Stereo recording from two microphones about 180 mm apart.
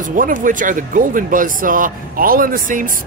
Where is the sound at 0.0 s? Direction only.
50° right (ahead or behind).